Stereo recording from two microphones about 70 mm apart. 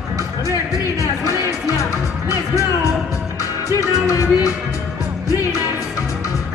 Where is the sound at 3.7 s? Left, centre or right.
Left.